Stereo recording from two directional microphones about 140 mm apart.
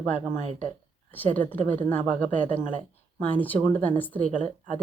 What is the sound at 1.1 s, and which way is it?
Speech, 15° left (ahead or behind).